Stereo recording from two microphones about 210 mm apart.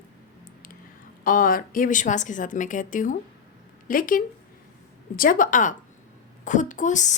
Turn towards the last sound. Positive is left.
turn(degrees=35)  # may be behind; listen again after turning